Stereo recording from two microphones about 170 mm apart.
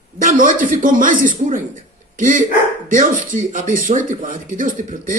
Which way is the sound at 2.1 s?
50° right (ahead or behind).